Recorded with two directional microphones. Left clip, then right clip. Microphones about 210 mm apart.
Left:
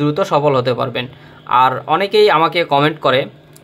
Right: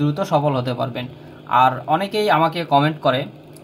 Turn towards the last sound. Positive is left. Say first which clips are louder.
# left 4 dB
turn(degrees=55)  # may be behind; listen again after turning